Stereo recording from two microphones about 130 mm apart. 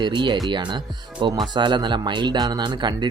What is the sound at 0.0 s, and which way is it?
Speech, 35° right (ahead or behind).